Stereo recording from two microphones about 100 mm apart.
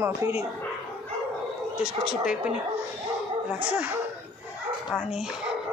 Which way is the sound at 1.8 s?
10° right (ahead or behind).